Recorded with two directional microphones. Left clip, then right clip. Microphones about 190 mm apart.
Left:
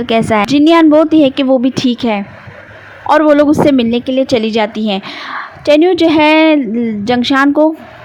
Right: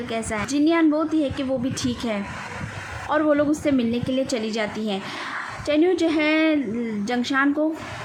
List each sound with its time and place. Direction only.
0.1 s a woman's voice: 45° left (ahead or behind)